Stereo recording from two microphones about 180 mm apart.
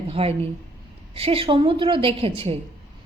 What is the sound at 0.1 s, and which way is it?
A woman's voice, 30° right (ahead or behind).